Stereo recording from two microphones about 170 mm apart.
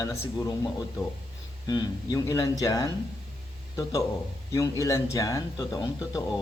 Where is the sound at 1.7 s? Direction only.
20° left (ahead or behind).